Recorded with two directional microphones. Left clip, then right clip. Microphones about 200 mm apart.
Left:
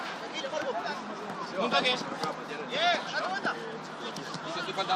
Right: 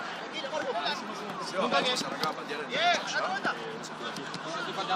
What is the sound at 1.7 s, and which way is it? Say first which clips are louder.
Speech: left 1 dB; 10° left (ahead or behind).